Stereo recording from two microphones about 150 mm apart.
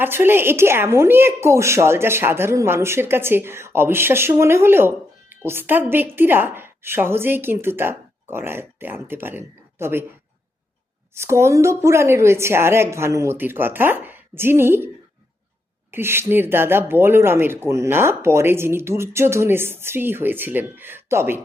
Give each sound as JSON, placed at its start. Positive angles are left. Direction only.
{"t": 0.0, "sound": "a woman's voice", "side_deg": -15}
{"t": 11.1, "sound": "a woman's voice", "side_deg": -20}
{"t": 15.9, "sound": "a woman's voice", "side_deg": -15}